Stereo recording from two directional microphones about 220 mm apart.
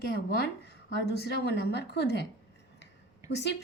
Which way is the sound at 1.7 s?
50° left (ahead or behind).